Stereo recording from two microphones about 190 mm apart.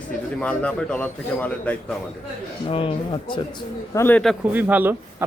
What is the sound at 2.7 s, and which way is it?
Speech, 30° left (ahead or behind).